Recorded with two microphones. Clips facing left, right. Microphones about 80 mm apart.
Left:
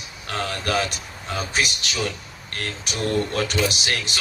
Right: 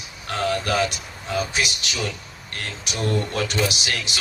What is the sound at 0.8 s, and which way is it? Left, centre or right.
A man's voice, left.